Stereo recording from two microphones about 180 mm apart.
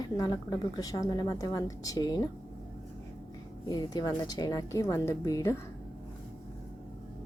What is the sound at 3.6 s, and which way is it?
A woman's voice, 20° left (ahead or behind).